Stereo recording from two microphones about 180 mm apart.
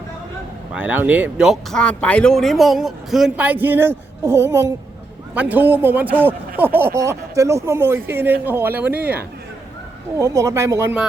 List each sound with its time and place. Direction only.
0.7 s speech: 10° right (ahead or behind)
10.2 s speech: 15° right (ahead or behind)